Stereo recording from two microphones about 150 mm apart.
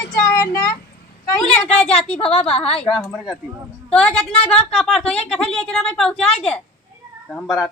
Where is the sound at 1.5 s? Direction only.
45° left (ahead or behind).